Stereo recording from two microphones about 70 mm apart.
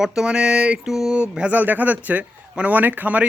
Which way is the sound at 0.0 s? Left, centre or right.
Centre.